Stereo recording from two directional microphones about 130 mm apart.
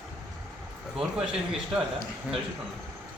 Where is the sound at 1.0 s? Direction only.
5° right (ahead or behind).